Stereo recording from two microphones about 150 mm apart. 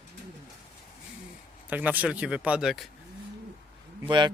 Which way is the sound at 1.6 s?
10° right (ahead or behind).